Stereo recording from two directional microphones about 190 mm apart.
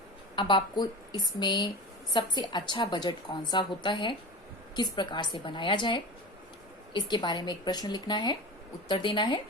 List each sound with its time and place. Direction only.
0.3 s a woman's voice: 25° left (ahead or behind)